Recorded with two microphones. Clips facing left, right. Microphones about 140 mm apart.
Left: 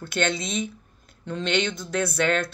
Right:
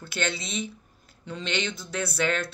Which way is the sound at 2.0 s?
50° left (ahead or behind).